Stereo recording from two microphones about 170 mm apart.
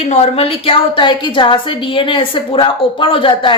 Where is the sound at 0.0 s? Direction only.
40° left (ahead or behind).